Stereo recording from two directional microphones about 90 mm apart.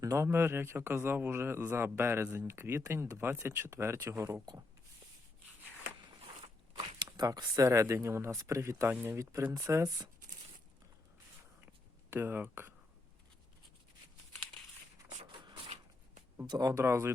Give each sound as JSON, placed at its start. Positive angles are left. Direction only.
{"t": 0.0, "sound": "speech", "side_deg": -35}
{"t": 7.0, "sound": "speech", "side_deg": -50}
{"t": 8.9, "sound": "speech", "side_deg": -20}
{"t": 9.4, "sound": "speech", "side_deg": -35}
{"t": 12.1, "sound": "speech", "side_deg": -20}
{"t": 15.3, "sound": "a sound", "side_deg": -60}
{"t": 16.5, "sound": "speech", "side_deg": -45}
{"t": 16.7, "sound": "speech", "side_deg": -30}